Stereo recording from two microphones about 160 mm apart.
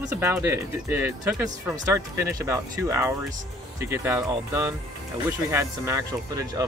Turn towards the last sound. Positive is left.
turn(degrees=-20)  # may be behind; listen again after turning